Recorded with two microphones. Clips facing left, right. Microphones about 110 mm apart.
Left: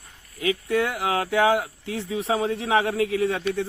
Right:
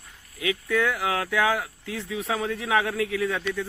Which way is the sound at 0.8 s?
15° left (ahead or behind).